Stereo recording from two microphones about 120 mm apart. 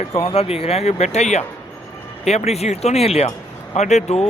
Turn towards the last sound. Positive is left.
turn(degrees=65)  # may be behind; listen again after turning